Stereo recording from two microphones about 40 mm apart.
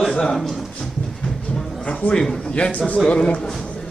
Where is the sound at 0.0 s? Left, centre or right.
Centre.